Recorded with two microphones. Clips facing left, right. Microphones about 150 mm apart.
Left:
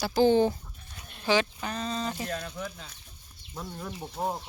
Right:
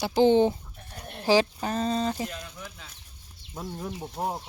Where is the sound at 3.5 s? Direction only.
20° right (ahead or behind).